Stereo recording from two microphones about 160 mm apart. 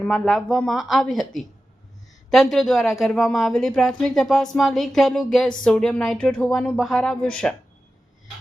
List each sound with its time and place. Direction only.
0.0 s speech: centre (ahead or behind)